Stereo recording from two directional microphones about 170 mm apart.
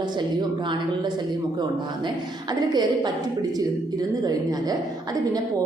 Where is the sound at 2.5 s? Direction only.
25° right (ahead or behind).